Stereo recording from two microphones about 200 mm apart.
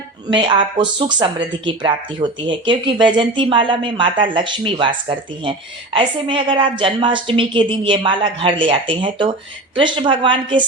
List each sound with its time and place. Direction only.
0.3 s speech: 25° right (ahead or behind)